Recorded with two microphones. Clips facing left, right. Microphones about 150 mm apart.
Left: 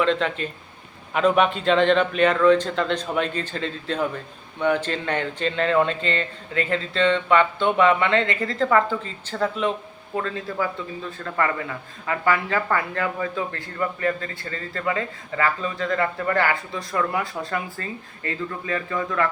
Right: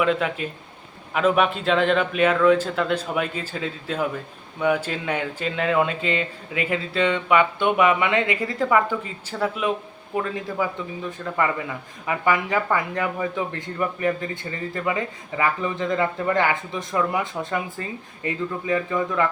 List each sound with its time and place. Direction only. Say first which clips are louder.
0.0 s a man's voice: even; 10° right (ahead or behind)